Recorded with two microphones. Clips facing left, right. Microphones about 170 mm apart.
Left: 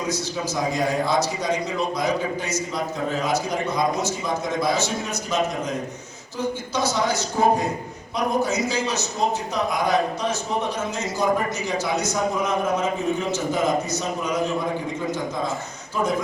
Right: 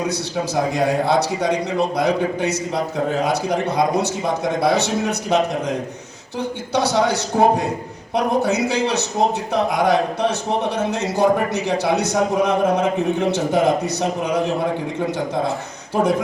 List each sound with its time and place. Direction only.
0.1 s a man's voice: 65° right (ahead or behind)
6.7 s a man's voice: 65° right (ahead or behind)